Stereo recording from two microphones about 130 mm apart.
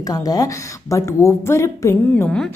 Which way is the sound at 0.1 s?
30° left (ahead or behind).